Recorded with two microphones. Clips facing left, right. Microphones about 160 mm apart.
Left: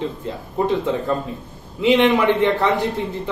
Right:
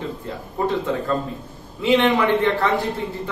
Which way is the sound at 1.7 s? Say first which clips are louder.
Left 2 dB; 20° left (ahead or behind).